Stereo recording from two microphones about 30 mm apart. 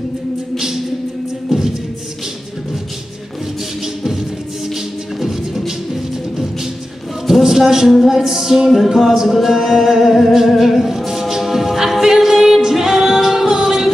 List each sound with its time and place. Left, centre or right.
1.5 s music: centre
3.8 s music: centre
5.2 s music: centre
7.4 s speech: centre
8.1 s music: centre
10.5 s a capella: centre
12.6 s music: centre